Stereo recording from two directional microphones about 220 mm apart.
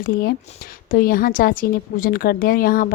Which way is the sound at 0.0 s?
45° left (ahead or behind).